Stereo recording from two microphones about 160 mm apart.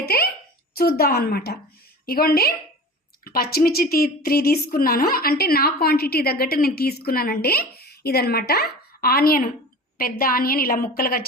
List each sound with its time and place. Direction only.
0.8 s a woman's voice: 70° left (ahead or behind)